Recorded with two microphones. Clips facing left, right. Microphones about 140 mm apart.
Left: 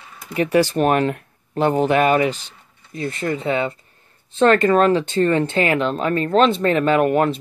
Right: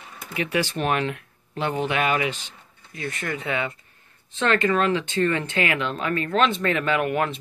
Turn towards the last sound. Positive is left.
turn(degrees=35)  # may be behind; listen again after turning